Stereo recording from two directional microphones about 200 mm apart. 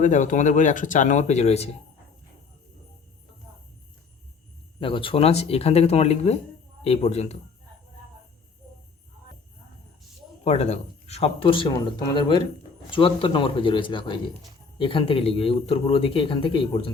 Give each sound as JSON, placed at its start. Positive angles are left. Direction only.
{"t": 0.0, "sound": "speech", "side_deg": 40}
{"t": 4.8, "sound": "speech", "side_deg": 25}
{"t": 10.4, "sound": "speech", "side_deg": 35}